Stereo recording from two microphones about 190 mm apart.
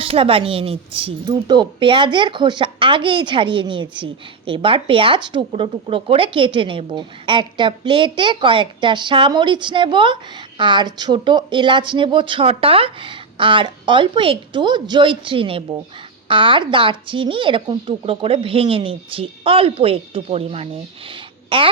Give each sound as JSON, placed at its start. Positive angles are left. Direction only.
{"t": 0.0, "sound": "a woman's voice", "side_deg": -30}